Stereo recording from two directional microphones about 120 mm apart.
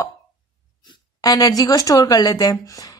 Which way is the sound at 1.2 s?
30° left (ahead or behind).